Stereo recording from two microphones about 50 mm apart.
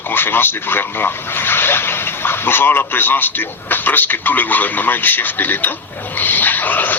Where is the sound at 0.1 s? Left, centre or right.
Left.